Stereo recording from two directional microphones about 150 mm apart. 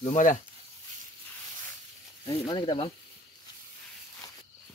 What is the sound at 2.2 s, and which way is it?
Speech, 35° left (ahead or behind).